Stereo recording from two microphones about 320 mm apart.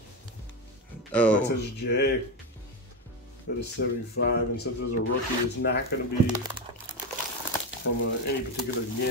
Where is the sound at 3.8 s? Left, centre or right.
Left.